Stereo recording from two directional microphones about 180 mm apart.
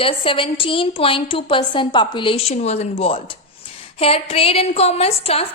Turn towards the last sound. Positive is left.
turn(degrees=35)  # may be behind; listen again after turning